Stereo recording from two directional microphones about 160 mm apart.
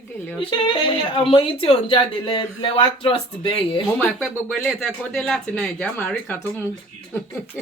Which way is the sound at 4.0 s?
5° left (ahead or behind).